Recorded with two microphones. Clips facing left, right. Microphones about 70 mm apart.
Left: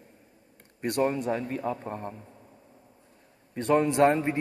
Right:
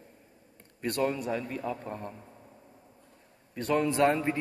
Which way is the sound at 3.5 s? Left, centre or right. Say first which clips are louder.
Left 4 dB; left.